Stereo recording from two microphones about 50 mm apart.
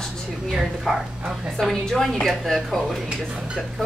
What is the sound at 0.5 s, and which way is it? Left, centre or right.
A woman's voice, centre.